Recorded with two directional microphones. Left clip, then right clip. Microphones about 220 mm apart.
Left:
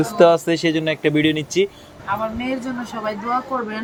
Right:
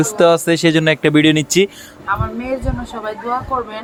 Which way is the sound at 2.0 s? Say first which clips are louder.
Right 3 dB; 10° right (ahead or behind).